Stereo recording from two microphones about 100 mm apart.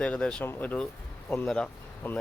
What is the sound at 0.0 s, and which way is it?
Speech, 10° left (ahead or behind).